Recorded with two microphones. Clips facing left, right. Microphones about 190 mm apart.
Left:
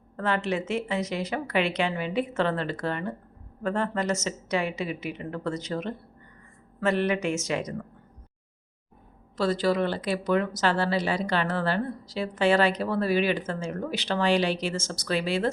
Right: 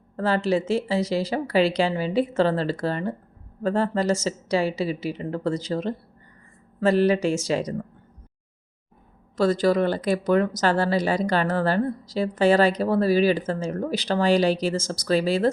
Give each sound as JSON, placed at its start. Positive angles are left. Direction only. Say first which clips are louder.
{"t": 0.2, "sound": "speech", "louder": "right 5 dB", "side_deg": -35}
{"t": 9.4, "sound": "speech", "louder": "right 4 dB", "side_deg": -45}